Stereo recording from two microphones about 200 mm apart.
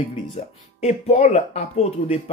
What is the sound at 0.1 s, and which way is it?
Speech, 30° left (ahead or behind).